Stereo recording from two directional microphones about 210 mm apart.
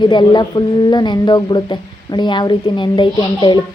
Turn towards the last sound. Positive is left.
turn(degrees=20)  # may be behind; listen again after turning